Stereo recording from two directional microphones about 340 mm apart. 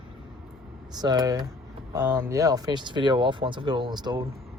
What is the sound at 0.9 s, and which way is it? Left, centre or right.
Speech, centre.